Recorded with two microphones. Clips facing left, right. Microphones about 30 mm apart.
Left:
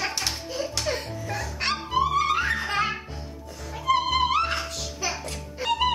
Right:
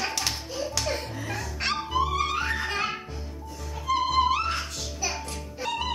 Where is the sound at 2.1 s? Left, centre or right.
Left.